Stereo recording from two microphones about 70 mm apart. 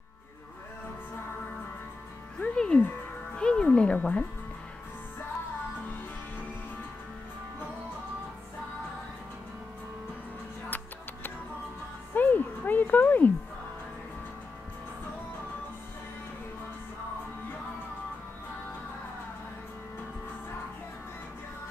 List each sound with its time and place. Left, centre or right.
2.4 s music: centre
3.3 s speech: centre
12.1 s music: left